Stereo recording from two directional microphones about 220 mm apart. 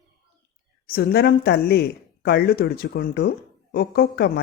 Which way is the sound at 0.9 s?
45° left (ahead or behind).